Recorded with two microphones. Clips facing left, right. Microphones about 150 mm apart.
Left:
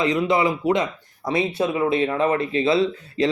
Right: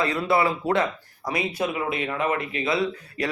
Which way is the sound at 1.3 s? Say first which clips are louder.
Left 5 dB; 25° left (ahead or behind).